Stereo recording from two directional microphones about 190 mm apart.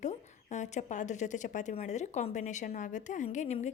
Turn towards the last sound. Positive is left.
turn(degrees=40)  # may be behind; listen again after turning